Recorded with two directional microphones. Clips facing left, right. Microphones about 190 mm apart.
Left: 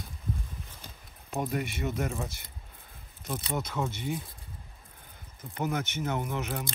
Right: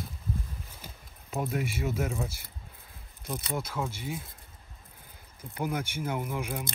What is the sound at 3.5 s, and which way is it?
Speech, 5° right (ahead or behind).